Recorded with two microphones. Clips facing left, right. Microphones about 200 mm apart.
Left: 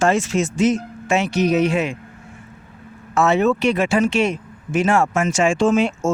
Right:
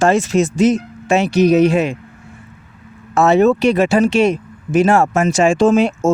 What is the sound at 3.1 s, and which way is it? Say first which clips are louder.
Speech: right 5 dB; 35° right (ahead or behind).